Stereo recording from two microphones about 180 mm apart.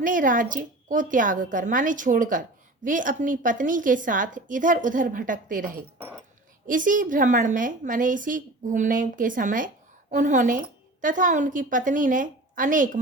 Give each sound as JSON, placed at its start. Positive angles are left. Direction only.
{"t": 0.0, "sound": "a woman's voice", "side_deg": -50}